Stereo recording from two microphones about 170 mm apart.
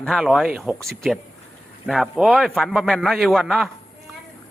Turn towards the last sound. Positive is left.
turn(degrees=0)  # may be behind; listen again after turning